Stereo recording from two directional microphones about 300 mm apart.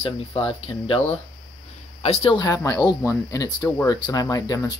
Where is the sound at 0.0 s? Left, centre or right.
Centre.